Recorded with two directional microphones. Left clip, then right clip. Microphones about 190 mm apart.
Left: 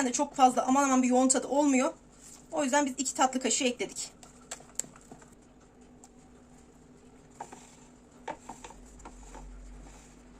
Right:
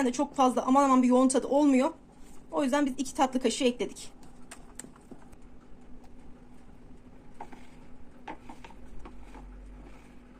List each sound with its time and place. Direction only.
0.0 s speech: 15° right (ahead or behind)